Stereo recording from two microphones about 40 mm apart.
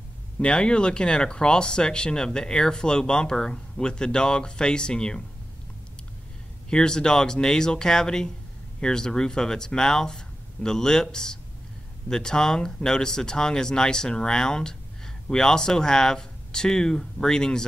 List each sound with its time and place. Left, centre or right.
0.4 s speech: left
6.7 s speech: centre